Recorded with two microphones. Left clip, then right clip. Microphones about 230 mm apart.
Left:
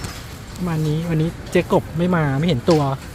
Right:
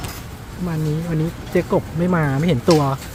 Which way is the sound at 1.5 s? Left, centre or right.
Centre.